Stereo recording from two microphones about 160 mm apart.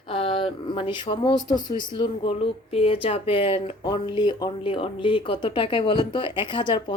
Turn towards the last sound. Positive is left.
turn(degrees=30)  # may be behind; listen again after turning